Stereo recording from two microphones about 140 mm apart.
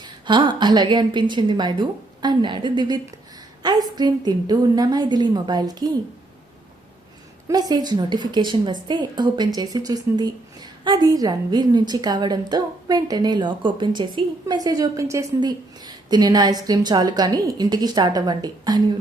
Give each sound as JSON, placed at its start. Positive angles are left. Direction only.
{"t": 0.0, "sound": "a woman's voice", "side_deg": -35}
{"t": 7.4, "sound": "a woman's voice", "side_deg": -30}